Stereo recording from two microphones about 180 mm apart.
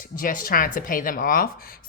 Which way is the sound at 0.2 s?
50° left (ahead or behind).